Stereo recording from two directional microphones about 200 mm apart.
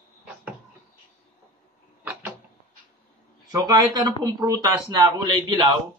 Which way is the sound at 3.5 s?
20° right (ahead or behind).